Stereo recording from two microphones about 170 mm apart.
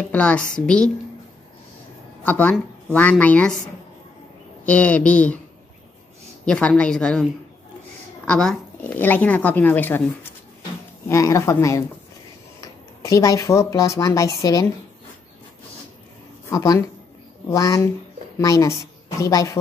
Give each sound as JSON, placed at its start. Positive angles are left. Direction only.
{"t": 0.1, "sound": "a woman's voice", "side_deg": 10}
{"t": 2.2, "sound": "a woman's voice", "side_deg": 10}
{"t": 4.6, "sound": "speech", "side_deg": 10}
{"t": 6.4, "sound": "a woman's voice", "side_deg": 5}
{"t": 8.3, "sound": "speech", "side_deg": 5}
{"t": 11.1, "sound": "speech", "side_deg": 20}
{"t": 16.4, "sound": "speech", "side_deg": 20}